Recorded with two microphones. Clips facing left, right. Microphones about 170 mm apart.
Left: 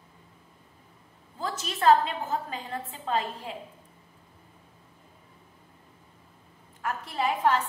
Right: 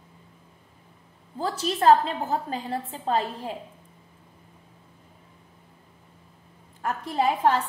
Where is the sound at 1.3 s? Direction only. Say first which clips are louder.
Right 6 dB; 35° right (ahead or behind).